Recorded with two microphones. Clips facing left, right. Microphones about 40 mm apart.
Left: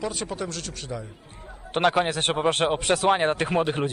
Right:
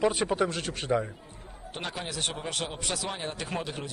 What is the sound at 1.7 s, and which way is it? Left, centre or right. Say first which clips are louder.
Speech: left 14 dB; left.